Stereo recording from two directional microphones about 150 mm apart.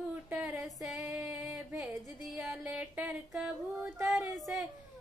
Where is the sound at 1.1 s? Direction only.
10° right (ahead or behind).